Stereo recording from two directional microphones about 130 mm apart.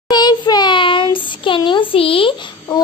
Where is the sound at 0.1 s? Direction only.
35° left (ahead or behind).